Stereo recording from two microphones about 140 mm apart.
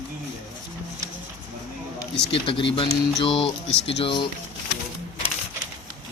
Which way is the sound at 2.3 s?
40° left (ahead or behind).